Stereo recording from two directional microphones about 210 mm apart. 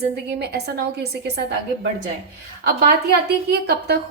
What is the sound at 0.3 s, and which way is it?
A woman's voice, 50° right (ahead or behind).